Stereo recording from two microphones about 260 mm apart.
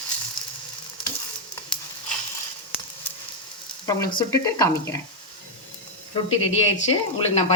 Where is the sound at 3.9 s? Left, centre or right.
Centre.